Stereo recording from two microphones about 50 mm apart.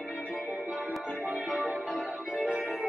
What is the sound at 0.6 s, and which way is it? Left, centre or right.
Music, right.